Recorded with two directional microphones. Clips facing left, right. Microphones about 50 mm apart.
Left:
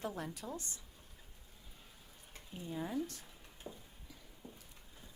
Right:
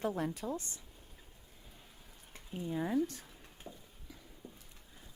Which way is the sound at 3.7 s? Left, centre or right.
Centre.